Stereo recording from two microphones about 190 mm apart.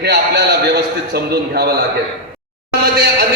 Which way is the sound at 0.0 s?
60° right (ahead or behind).